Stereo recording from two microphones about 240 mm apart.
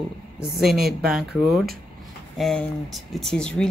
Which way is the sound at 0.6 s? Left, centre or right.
Centre.